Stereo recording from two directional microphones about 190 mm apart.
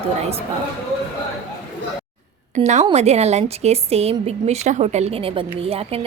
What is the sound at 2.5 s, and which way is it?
A woman's voice, 35° right (ahead or behind).